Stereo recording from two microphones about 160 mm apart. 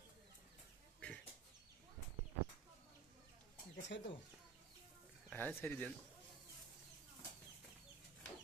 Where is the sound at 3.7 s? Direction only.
90° left.